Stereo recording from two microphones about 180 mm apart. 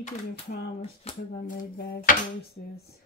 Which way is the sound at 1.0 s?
35° left (ahead or behind).